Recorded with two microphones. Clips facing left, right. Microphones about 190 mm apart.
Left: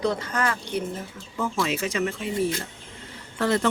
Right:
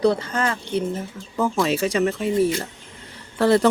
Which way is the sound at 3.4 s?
35° right (ahead or behind).